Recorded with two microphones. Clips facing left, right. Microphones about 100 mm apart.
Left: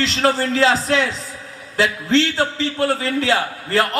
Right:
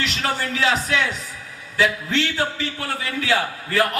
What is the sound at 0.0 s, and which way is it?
A man's voice, 30° left (ahead or behind).